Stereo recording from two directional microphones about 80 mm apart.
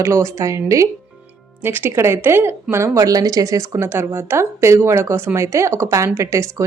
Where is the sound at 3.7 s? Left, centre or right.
Right.